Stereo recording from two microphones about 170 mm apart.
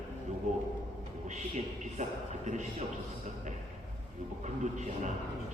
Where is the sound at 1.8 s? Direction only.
45° right (ahead or behind).